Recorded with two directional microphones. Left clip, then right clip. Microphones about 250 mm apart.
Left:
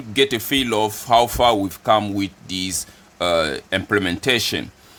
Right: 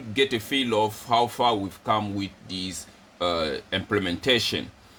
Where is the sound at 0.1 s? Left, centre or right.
Left.